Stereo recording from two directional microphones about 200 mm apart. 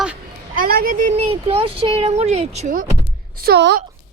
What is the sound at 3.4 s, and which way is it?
Speech, 55° right (ahead or behind).